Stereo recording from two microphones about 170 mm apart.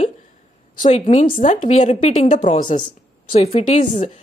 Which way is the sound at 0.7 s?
40° left (ahead or behind).